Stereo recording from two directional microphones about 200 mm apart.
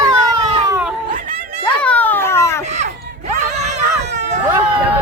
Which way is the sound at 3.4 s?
35° right (ahead or behind).